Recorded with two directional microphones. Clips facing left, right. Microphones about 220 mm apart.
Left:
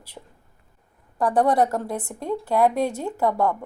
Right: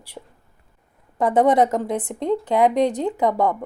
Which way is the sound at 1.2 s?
20° right (ahead or behind).